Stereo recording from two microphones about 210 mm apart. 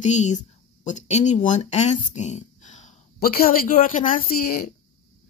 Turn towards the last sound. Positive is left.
turn(degrees=45)  # may be behind; listen again after turning